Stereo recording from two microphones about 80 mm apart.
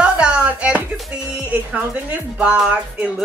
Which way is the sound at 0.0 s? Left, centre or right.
Centre.